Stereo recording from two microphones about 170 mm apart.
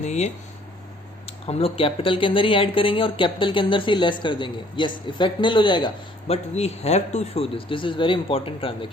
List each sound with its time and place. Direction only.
0.0 s speech: 45° left (ahead or behind)
1.5 s speech: 35° left (ahead or behind)